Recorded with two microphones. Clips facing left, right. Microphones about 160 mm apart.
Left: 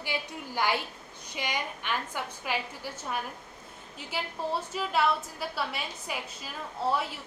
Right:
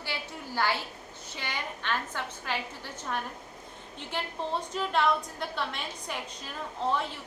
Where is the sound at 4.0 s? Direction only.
5° left (ahead or behind).